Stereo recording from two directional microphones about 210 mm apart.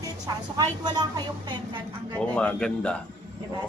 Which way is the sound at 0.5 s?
20° right (ahead or behind).